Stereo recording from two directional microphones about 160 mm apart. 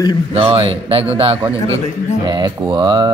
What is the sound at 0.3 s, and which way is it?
A man's voice, 35° right (ahead or behind).